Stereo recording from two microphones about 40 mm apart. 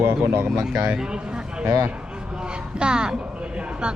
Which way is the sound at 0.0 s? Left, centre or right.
Right.